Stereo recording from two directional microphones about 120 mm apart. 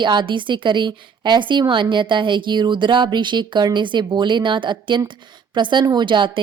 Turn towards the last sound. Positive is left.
turn(degrees=-45)  # may be behind; listen again after turning